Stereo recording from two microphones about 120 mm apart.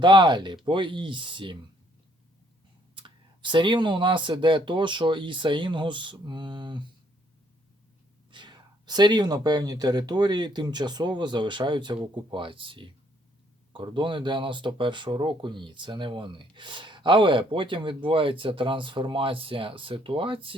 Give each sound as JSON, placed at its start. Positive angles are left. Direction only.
{"t": 0.0, "sound": "speech", "side_deg": -40}
{"t": 2.9, "sound": "speech", "side_deg": -40}
{"t": 8.3, "sound": "speech", "side_deg": -40}